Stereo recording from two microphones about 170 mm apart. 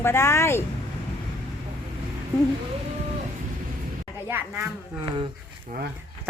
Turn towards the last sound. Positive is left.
turn(degrees=-55)  # may be behind; listen again after turning